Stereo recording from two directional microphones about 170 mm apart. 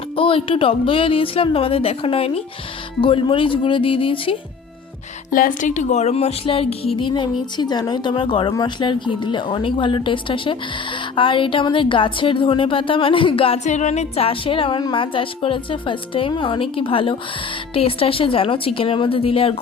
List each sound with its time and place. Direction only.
0.2 s a woman's voice: 30° left (ahead or behind)
5.3 s a woman's voice: 55° left (ahead or behind); by 19.5 s 35° left (ahead or behind)